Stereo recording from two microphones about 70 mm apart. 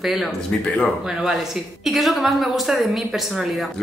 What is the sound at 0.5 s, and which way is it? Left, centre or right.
Speech, centre.